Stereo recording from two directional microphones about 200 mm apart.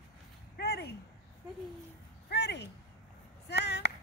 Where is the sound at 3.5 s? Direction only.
55° left (ahead or behind).